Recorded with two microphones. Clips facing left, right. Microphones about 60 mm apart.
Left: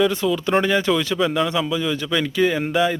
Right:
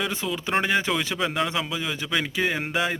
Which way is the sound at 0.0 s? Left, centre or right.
Centre.